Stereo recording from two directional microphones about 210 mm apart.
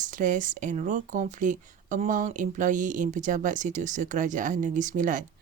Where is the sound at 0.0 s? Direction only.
40° right (ahead or behind).